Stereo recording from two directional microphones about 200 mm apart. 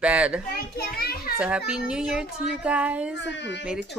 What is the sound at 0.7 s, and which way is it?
Speech, 50° left (ahead or behind).